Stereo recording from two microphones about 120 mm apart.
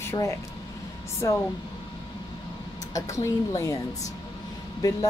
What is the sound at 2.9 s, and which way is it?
Speech, 30° left (ahead or behind).